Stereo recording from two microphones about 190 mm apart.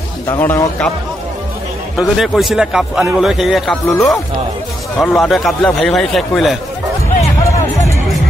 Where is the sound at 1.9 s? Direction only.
Centre (ahead or behind).